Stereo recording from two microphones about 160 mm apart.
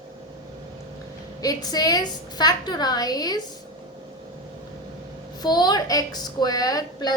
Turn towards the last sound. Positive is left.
turn(degrees=25)  # may be behind; listen again after turning